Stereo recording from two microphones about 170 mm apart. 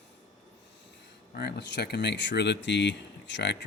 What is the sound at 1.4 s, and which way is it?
Speech, 75° left (ahead or behind).